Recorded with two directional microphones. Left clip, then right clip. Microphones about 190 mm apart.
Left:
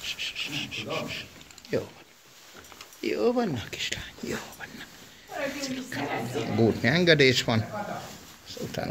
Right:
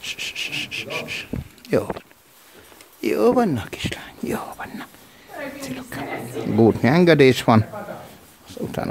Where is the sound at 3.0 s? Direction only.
45° right (ahead or behind).